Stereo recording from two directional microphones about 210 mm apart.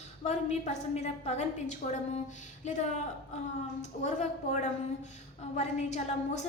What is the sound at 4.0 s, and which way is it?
A woman's voice, 35° left (ahead or behind).